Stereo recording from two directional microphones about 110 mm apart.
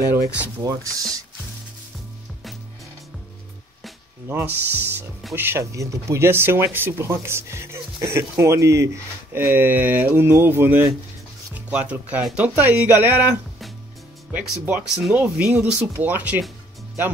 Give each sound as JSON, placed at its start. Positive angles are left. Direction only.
{"t": 0.6, "sound": "speech", "side_deg": -30}
{"t": 4.3, "sound": "speech", "side_deg": -20}